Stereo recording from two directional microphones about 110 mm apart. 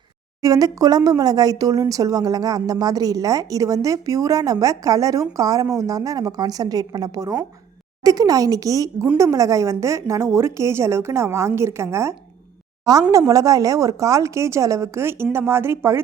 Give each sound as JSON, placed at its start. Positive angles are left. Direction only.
{"t": 0.4, "sound": "speech", "side_deg": -35}